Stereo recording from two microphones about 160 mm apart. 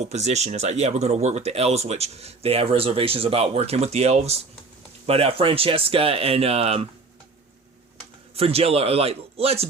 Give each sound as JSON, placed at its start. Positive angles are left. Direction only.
{"t": 0.0, "sound": "speech", "side_deg": -45}
{"t": 8.4, "sound": "speech", "side_deg": -35}